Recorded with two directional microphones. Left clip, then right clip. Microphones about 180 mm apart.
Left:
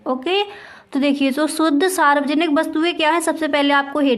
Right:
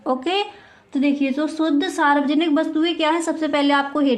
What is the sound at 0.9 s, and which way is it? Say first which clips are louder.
A woman's voice: left 2 dB; 45° left (ahead or behind).